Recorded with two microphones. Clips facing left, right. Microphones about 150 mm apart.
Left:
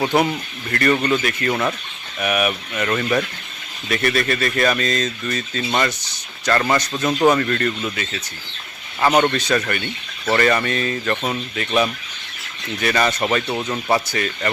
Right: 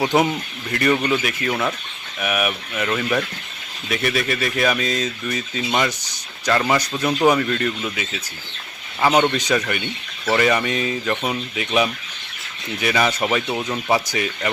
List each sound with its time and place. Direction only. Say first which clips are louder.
0.0 s speech: even; 15° right (ahead or behind)